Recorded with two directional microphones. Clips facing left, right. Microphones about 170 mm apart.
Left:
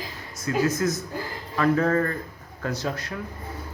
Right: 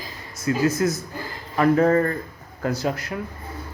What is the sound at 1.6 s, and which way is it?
Speech, 30° right (ahead or behind).